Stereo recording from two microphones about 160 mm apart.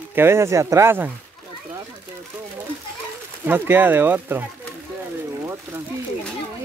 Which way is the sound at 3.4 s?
15° right (ahead or behind).